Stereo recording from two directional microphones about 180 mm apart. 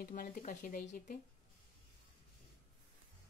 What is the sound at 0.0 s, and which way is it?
Speech, 50° left (ahead or behind).